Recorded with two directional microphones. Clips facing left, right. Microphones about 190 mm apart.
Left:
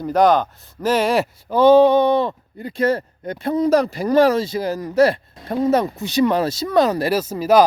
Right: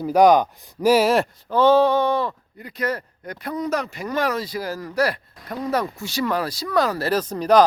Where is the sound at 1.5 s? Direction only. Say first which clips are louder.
Left 5 dB; 15° left (ahead or behind).